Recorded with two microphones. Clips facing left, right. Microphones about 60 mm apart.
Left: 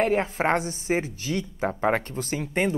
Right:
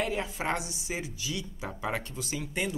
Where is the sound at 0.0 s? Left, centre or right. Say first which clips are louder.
Left 8 dB; left.